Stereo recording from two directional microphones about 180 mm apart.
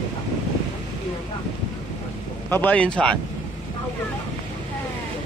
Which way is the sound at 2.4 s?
10° left (ahead or behind).